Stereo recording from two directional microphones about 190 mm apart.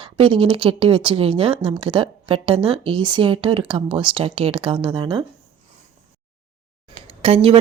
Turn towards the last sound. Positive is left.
turn(degrees=-30)  # may be behind; listen again after turning